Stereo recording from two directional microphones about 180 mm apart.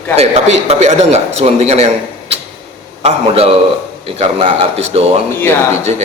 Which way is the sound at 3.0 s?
30° right (ahead or behind).